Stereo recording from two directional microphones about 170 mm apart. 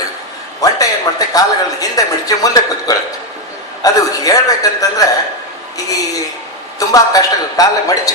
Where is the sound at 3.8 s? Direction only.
20° left (ahead or behind).